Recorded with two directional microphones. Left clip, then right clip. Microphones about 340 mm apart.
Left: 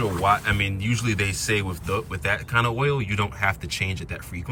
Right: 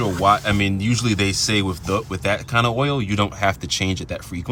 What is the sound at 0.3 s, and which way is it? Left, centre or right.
Speech, centre.